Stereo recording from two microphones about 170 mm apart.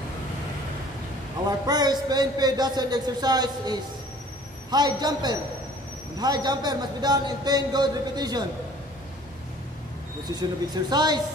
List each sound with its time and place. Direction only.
1.7 s a man's voice: 25° right (ahead or behind)
10.7 s a man's voice: 25° right (ahead or behind)